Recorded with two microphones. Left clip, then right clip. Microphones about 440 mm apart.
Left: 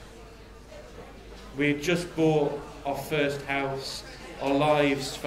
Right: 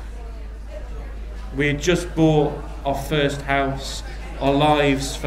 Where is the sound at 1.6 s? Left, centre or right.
Right.